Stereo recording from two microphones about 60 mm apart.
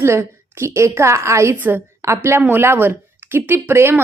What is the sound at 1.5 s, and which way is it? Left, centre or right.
Speech, right.